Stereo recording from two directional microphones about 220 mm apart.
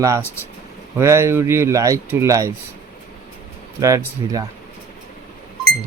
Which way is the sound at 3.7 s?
15° right (ahead or behind).